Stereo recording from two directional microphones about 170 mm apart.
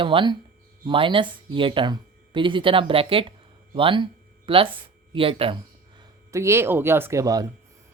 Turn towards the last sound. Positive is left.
turn(degrees=-20)  # may be behind; listen again after turning